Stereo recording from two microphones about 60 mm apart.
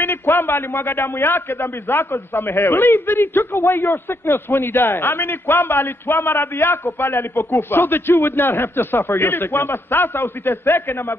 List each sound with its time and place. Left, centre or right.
0.0 s a man's voice: left